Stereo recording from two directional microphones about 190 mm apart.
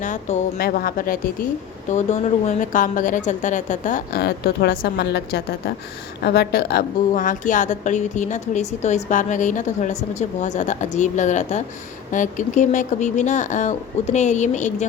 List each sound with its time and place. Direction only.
0.0 s a woman's voice: 40° left (ahead or behind)
0.6 s speech: 50° left (ahead or behind)
1.9 s a woman's voice: 40° left (ahead or behind)